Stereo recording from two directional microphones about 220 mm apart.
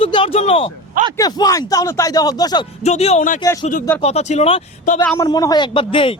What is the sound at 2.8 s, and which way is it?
Speech, 30° left (ahead or behind).